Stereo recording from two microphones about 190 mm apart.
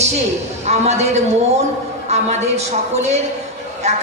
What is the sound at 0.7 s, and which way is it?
A woman's voice, 35° right (ahead or behind).